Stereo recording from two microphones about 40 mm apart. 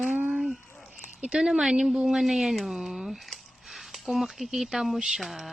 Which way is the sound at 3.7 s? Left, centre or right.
Centre.